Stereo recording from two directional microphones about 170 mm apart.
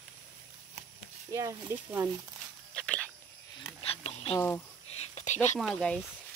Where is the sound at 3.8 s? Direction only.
35° left (ahead or behind).